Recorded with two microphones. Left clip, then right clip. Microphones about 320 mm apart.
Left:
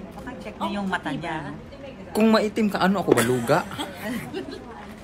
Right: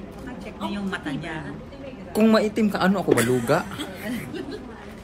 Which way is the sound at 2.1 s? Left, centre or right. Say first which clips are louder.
Right 1 dB; centre.